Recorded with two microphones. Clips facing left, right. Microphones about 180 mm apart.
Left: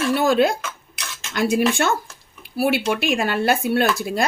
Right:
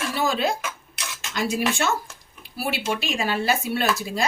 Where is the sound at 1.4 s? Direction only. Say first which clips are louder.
Left 5 dB; 55° left (ahead or behind).